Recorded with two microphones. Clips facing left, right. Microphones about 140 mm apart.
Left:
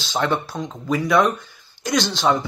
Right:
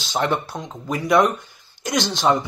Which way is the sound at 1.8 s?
15° right (ahead or behind).